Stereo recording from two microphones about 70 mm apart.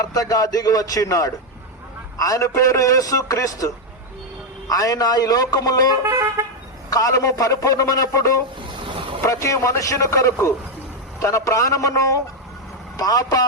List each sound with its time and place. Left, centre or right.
0.0 s a man's voice: left
4.7 s a man's voice: left
6.1 s vehicle: right
6.9 s a man's voice: left